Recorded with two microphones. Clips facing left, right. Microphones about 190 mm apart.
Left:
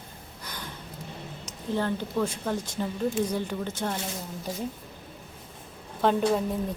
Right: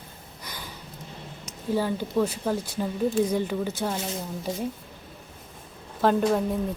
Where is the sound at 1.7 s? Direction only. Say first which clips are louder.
Right 3 dB; 10° right (ahead or behind).